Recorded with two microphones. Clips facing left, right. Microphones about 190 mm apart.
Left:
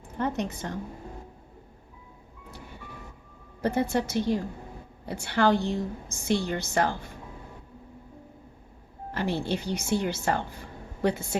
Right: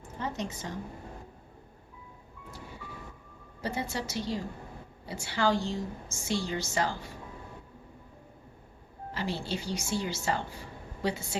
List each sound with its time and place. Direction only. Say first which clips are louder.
0.2 s a woman's voice: left 6 dB; 60° left (ahead or behind)
3.6 s a woman's voice: left 8 dB; 55° left (ahead or behind)
9.1 s a woman's voice: left 5 dB; 55° left (ahead or behind)